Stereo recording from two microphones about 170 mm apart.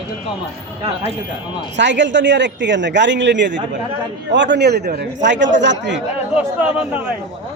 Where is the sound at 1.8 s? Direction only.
90° right.